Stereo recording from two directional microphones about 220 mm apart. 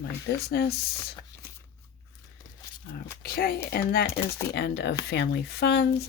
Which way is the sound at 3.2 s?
45° left (ahead or behind).